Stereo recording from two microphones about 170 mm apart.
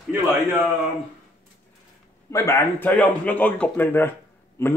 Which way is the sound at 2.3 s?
15° left (ahead or behind).